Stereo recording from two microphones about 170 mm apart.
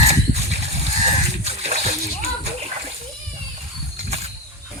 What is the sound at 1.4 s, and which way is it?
Splash, 40° right (ahead or behind).